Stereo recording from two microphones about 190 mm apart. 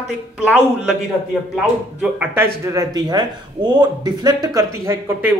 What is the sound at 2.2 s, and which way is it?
Speech, 10° right (ahead or behind).